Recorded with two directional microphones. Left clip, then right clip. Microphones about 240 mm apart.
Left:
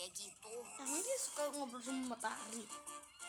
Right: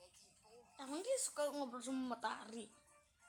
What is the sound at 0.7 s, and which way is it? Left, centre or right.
A woman's voice, centre.